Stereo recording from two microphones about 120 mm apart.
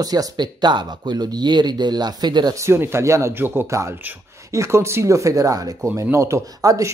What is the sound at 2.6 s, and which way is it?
Speech, 20° right (ahead or behind).